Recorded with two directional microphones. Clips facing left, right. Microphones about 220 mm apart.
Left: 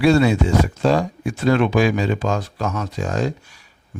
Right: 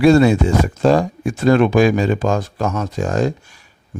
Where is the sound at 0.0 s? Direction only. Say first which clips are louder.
Right 4 dB; 45° right (ahead or behind).